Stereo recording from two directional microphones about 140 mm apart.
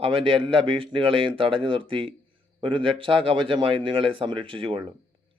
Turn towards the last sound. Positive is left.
turn(degrees=-40)  # may be behind; listen again after turning